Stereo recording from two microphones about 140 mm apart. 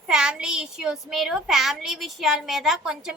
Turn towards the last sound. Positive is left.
turn(degrees=-5)  # may be behind; listen again after turning